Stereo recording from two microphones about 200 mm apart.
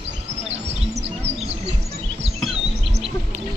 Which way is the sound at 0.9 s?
30° right (ahead or behind).